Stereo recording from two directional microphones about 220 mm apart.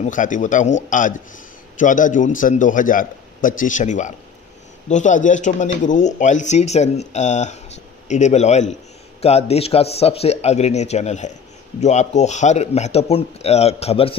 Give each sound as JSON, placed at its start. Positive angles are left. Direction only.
{"t": 0.0, "sound": "a man's voice", "side_deg": 35}